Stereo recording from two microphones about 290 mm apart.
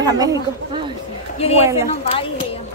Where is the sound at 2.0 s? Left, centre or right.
Centre.